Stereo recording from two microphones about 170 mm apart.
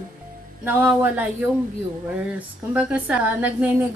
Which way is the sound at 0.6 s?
10° right (ahead or behind).